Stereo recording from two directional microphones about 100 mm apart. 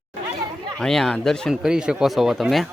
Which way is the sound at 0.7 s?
5° left (ahead or behind).